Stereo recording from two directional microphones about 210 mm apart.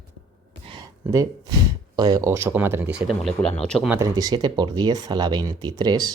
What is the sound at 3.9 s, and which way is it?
Speech, 15° right (ahead or behind).